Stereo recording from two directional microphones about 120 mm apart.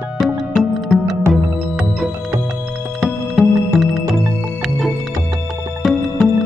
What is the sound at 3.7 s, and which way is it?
Music, centre (ahead or behind).